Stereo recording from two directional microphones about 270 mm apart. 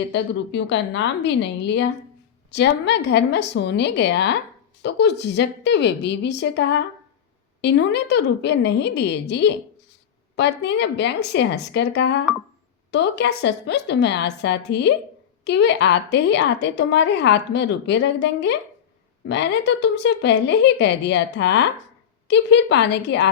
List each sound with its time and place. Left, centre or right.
0.1 s a woman's voice: left